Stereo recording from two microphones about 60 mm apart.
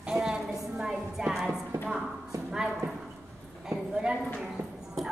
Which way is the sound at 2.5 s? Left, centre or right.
Centre.